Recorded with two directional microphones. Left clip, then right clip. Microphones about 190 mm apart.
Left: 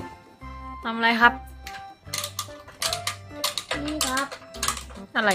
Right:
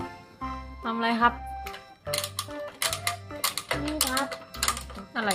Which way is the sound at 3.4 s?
15° right (ahead or behind).